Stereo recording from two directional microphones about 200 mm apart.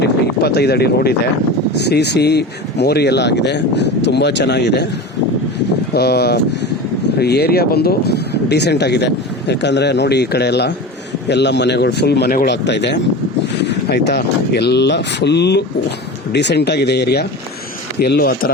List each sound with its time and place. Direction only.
0.0 s a sound: 55° left (ahead or behind)
1.8 s speech: 55° left (ahead or behind)
5.9 s speech: 55° left (ahead or behind)